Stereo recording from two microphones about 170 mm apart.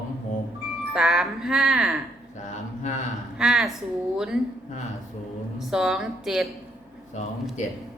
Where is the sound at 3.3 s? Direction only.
5° right (ahead or behind).